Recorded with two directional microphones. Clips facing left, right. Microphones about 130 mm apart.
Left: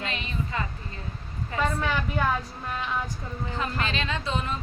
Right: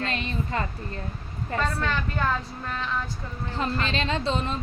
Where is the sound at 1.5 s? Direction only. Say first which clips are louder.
Left 1 dB; 10° left (ahead or behind).